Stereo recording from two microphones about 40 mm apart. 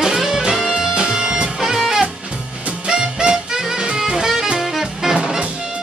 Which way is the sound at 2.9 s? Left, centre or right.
Centre.